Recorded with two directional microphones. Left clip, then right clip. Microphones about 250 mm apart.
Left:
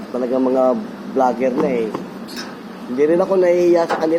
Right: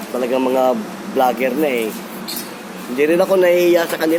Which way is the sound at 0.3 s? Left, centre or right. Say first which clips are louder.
Even; centre.